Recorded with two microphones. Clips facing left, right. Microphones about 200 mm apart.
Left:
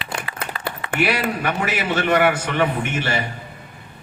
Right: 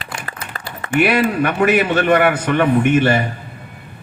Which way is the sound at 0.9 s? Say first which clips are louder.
Right 7 dB; 55° right (ahead or behind).